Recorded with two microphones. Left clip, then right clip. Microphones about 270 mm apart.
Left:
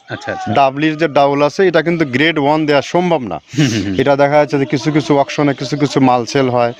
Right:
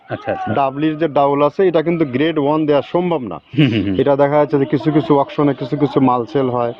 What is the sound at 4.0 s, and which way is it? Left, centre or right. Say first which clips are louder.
Speech: left 3 dB; left.